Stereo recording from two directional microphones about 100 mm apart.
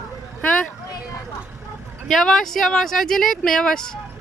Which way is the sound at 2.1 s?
5° left (ahead or behind).